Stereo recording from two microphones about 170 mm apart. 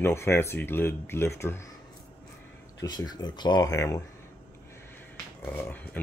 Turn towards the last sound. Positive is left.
turn(degrees=10)  # may be behind; listen again after turning